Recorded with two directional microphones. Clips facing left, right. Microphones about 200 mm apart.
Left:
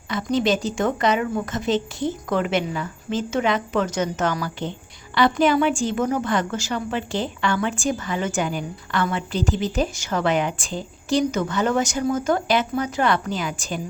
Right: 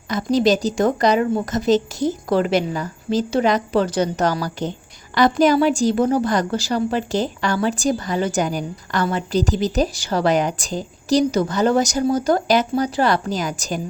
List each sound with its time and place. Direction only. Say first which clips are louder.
0.1 s a woman's voice: right 4 dB; 40° right (ahead or behind)